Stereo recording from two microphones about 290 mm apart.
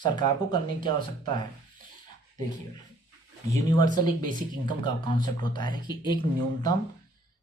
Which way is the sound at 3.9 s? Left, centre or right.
Centre.